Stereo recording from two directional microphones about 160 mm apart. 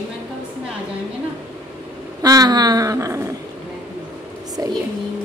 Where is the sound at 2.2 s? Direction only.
25° right (ahead or behind).